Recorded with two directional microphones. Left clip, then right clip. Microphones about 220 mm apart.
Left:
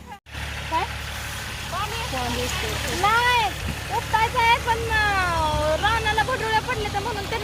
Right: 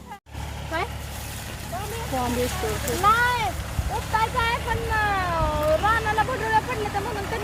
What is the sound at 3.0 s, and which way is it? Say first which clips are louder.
Vehicle: left 1 dB; 40° left (ahead or behind).